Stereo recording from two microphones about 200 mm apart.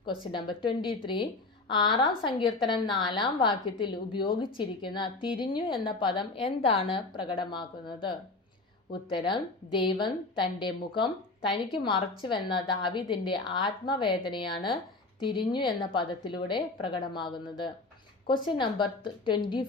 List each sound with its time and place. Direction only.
0.0 s a woman's voice: 25° left (ahead or behind)
9.0 s a woman's voice: 25° left (ahead or behind)